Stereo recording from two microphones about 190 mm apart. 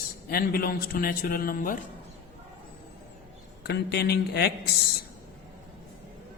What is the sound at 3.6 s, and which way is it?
Speech, 60° left (ahead or behind).